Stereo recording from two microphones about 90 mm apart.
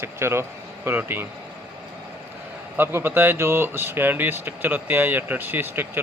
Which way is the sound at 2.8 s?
25° right (ahead or behind).